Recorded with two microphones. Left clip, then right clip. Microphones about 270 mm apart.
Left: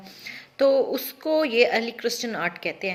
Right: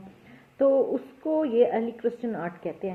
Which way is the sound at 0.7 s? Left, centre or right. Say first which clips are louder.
Left 1 dB; left.